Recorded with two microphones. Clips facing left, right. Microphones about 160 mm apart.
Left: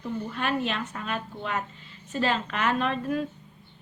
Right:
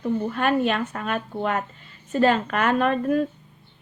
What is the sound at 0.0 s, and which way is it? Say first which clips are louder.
Speech: right 7 dB; 50° right (ahead or behind).